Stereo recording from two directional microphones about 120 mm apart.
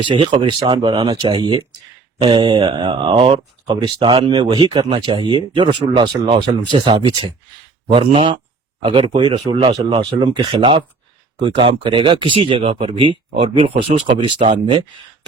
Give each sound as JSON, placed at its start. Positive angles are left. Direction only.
{"t": 0.0, "sound": "speech", "side_deg": -45}
{"t": 3.7, "sound": "speech", "side_deg": -35}
{"t": 7.9, "sound": "speech", "side_deg": -45}